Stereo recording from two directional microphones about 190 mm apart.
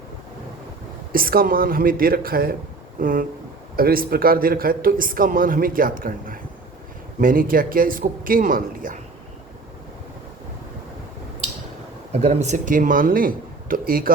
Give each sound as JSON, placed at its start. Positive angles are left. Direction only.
{"t": 1.1, "sound": "a man's voice", "side_deg": -50}
{"t": 12.1, "sound": "a man's voice", "side_deg": -35}